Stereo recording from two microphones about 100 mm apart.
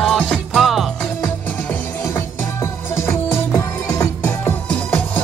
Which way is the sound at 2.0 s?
30° left (ahead or behind).